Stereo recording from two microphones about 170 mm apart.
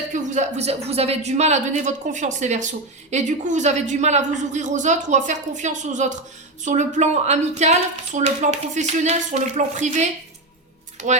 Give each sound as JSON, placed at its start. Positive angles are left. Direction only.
{"t": 0.1, "sound": "a woman's voice", "side_deg": -45}